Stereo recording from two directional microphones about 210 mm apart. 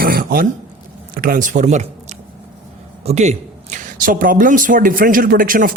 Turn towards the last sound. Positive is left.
turn(degrees=-40)  # may be behind; listen again after turning